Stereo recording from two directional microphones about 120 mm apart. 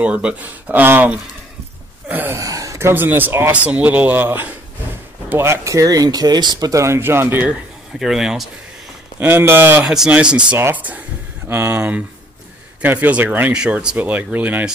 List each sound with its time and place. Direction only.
0.0 s speech: 10° right (ahead or behind)
8.0 s speech: 5° right (ahead or behind)
9.2 s speech: 15° right (ahead or behind)
9.8 s speech: 5° right (ahead or behind)